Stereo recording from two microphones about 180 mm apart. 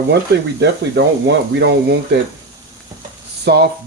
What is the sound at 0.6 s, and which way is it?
Speech, 70° right (ahead or behind).